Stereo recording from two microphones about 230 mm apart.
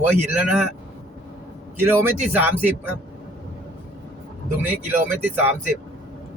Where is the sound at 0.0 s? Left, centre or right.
Centre.